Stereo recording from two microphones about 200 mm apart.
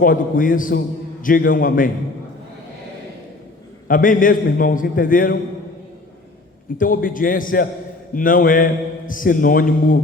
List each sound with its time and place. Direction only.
0.0 s a man's voice: 45° left (ahead or behind)
3.8 s a man's voice: 45° left (ahead or behind)
6.7 s a man's voice: 45° left (ahead or behind)